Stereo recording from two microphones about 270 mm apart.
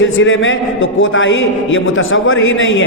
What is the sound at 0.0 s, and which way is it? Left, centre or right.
A man's voice, left.